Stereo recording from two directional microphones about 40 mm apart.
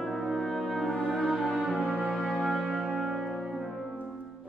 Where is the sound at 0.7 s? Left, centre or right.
Centre.